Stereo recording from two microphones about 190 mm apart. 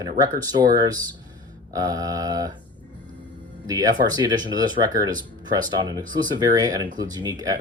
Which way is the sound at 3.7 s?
20° right (ahead or behind).